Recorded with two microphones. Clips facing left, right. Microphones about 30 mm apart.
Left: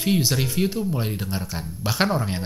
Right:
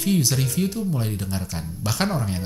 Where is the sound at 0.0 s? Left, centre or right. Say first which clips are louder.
Even; left.